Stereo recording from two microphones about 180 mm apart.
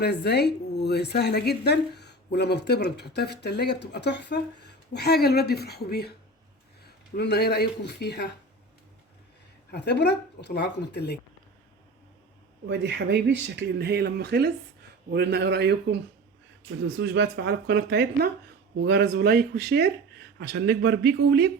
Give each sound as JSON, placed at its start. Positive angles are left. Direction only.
{"t": 0.0, "sound": "a woman's voice", "side_deg": 65}
{"t": 7.2, "sound": "a woman's voice", "side_deg": 65}
{"t": 9.7, "sound": "speech", "side_deg": 70}
{"t": 12.6, "sound": "speech", "side_deg": -75}
{"t": 17.0, "sound": "speech", "side_deg": -80}